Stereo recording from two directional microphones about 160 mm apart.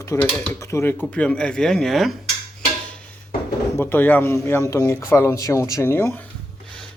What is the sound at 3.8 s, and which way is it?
Speech, 10° left (ahead or behind).